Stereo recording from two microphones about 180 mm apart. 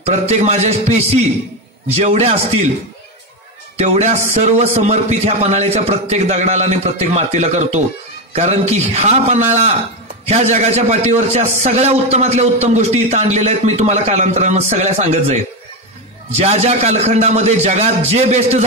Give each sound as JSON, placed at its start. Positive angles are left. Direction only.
{"t": 0.0, "sound": "a man's voice", "side_deg": -40}
{"t": 3.7, "sound": "a man's voice", "side_deg": -40}
{"t": 16.3, "sound": "a man's voice", "side_deg": -35}